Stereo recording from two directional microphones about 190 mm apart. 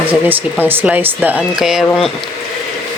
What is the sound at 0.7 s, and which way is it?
A woman's voice, 10° right (ahead or behind).